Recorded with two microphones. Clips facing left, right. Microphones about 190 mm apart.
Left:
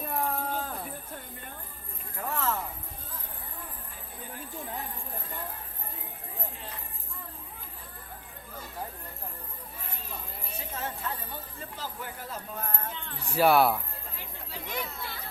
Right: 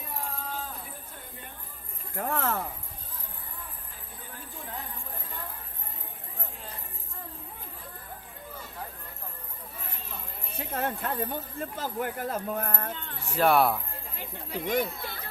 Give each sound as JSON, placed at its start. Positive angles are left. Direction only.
{"t": 0.1, "sound": "a sound", "side_deg": 55}
{"t": 2.1, "sound": "speech", "side_deg": -55}
{"t": 10.6, "sound": "speech", "side_deg": -55}
{"t": 13.2, "sound": "speech", "side_deg": 10}
{"t": 14.5, "sound": "speech", "side_deg": -55}